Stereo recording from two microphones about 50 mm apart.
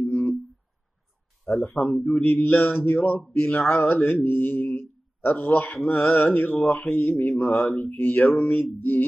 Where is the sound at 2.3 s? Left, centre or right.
Left.